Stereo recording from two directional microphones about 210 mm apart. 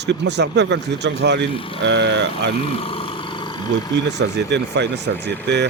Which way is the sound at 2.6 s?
25° left (ahead or behind).